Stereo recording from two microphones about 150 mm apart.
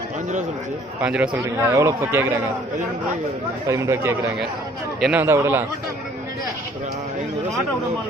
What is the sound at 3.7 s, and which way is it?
Speech, 20° right (ahead or behind).